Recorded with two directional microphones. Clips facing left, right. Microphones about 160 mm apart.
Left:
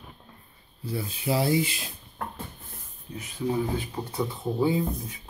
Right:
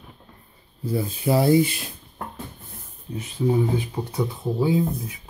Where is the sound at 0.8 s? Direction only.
45° right (ahead or behind).